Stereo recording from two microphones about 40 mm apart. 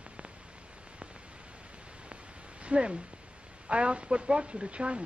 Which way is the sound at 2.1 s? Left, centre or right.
Right.